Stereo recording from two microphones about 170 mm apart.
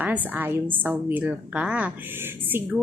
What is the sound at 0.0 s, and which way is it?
A woman's voice, 10° right (ahead or behind).